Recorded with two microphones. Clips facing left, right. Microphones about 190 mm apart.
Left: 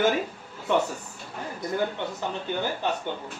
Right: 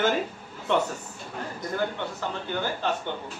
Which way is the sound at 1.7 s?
15° left (ahead or behind).